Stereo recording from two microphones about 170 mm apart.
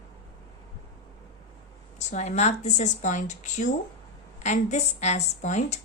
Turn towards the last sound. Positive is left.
turn(degrees=40)  # may be behind; listen again after turning